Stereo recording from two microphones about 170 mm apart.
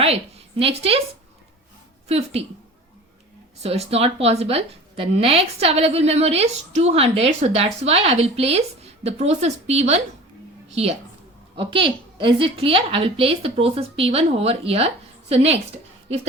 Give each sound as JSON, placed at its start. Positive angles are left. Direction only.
{"t": 0.0, "sound": "a woman's voice", "side_deg": -35}
{"t": 2.0, "sound": "a woman's voice", "side_deg": -40}
{"t": 3.6, "sound": "a woman's voice", "side_deg": -35}